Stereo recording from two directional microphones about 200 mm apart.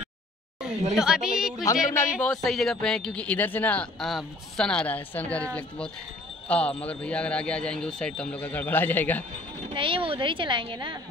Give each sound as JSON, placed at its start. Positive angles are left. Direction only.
{"t": 0.9, "sound": "speech", "side_deg": -5}
{"t": 1.6, "sound": "speech", "side_deg": 15}
{"t": 2.4, "sound": "speech", "side_deg": 0}
{"t": 9.8, "sound": "a woman's voice", "side_deg": -25}